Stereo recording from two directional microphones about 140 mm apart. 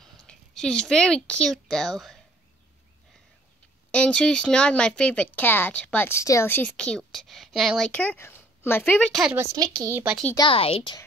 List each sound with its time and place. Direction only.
0.0 s a woman's voice: 5° left (ahead or behind)
3.9 s speech: 5° left (ahead or behind)
7.9 s speech: 10° left (ahead or behind)
9.3 s a woman's voice: 15° right (ahead or behind)
9.6 s speech: 30° right (ahead or behind)
10.5 s a woman's voice: 40° left (ahead or behind)